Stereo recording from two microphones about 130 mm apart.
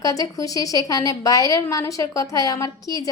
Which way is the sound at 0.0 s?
25° left (ahead or behind).